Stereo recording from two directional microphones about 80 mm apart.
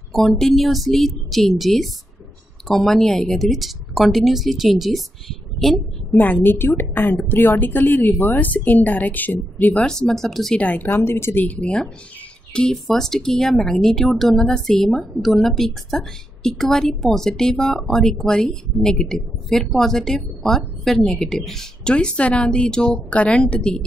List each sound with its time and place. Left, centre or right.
0.1 s speech: centre
6.1 s a woman's voice: left
9.8 s speech: centre
10.6 s a woman's voice: left
11.4 s speech: centre